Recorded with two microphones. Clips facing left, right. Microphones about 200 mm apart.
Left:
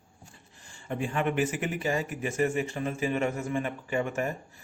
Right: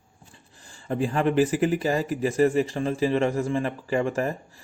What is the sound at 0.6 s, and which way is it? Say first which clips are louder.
Speech: right 6 dB; 35° right (ahead or behind).